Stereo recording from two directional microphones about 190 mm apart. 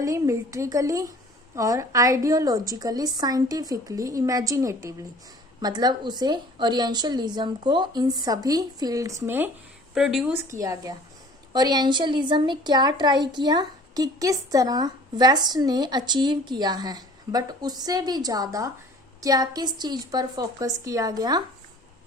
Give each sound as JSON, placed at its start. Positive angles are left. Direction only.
{"t": 0.0, "sound": "a woman's voice", "side_deg": -15}
{"t": 10.5, "sound": "a woman's voice", "side_deg": -15}